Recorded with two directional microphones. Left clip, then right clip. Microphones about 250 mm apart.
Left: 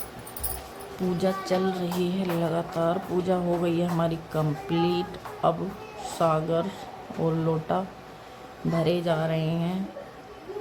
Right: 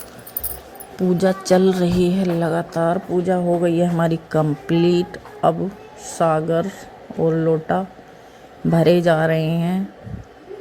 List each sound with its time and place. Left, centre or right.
1.2 s speech: right
4.7 s speech: right
5.4 s speech: centre
8.7 s speech: right